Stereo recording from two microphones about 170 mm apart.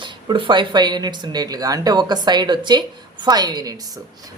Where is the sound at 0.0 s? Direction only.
30° right (ahead or behind).